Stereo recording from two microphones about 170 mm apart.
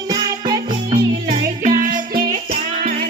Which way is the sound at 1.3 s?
45° right (ahead or behind).